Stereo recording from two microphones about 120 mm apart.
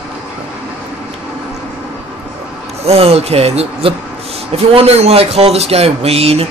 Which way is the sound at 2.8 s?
60° right (ahead or behind).